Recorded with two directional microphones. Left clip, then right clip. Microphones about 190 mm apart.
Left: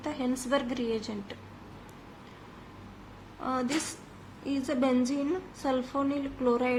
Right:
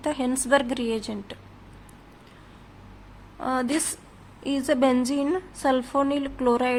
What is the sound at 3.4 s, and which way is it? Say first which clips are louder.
A woman's voice: right 5 dB; 50° right (ahead or behind).